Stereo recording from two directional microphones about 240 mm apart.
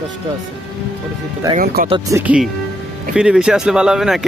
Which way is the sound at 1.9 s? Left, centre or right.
Centre.